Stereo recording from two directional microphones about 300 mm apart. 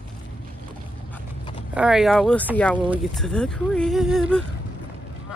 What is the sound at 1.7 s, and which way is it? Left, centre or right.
Speech, centre.